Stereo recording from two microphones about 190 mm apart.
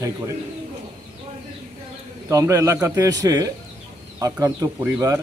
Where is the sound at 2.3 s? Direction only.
15° right (ahead or behind).